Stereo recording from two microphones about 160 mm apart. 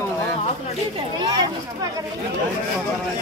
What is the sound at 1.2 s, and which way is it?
Speech, 25° right (ahead or behind).